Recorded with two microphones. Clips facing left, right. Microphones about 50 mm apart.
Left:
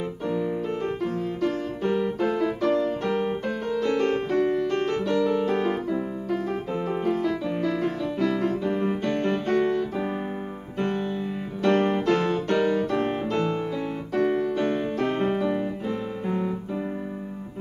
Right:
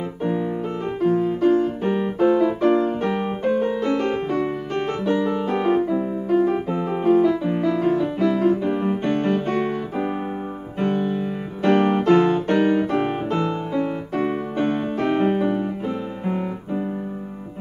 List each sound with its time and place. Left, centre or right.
0.2 s music: right
6.2 s piano: centre
9.1 s music: right
13.7 s keyboard: right